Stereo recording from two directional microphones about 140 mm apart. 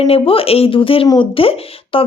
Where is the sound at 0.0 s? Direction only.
40° left (ahead or behind).